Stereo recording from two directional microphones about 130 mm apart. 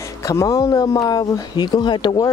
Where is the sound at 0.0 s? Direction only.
25° left (ahead or behind).